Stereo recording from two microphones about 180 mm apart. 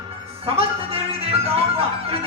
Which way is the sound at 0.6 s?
35° right (ahead or behind).